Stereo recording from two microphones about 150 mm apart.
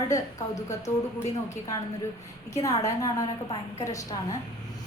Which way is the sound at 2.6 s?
20° left (ahead or behind).